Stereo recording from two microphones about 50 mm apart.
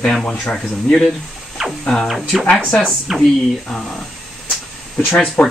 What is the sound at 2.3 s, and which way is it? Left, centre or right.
Speech, centre.